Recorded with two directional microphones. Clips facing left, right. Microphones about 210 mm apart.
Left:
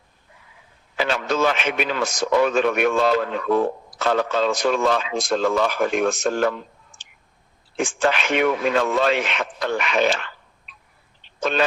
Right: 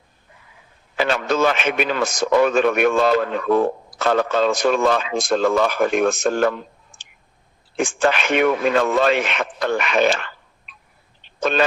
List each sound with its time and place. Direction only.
0.9 s a man's voice: 50° right (ahead or behind)
7.8 s a man's voice: 50° right (ahead or behind)